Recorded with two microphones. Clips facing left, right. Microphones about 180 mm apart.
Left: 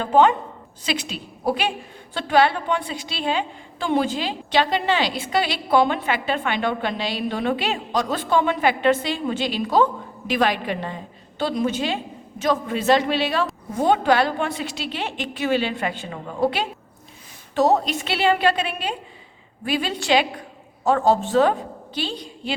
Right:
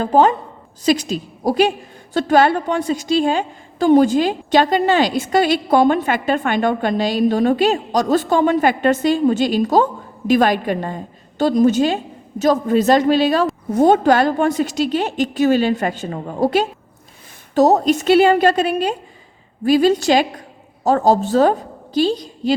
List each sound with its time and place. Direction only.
0.0 s a woman's voice: 40° right (ahead or behind)